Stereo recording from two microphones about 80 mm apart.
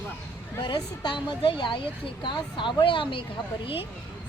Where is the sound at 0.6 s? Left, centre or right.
Left.